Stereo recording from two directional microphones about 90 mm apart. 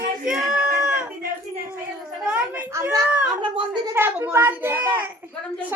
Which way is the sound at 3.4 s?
60° right (ahead or behind).